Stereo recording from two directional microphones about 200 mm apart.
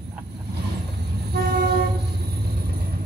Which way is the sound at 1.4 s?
50° right (ahead or behind).